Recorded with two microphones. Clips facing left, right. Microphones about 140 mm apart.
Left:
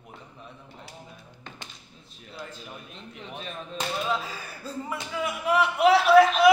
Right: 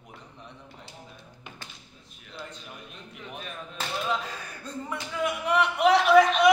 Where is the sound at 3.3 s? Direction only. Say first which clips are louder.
Left 2 dB; 30° left (ahead or behind).